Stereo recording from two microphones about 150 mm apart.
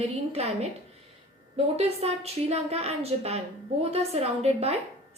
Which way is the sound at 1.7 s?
45° right (ahead or behind).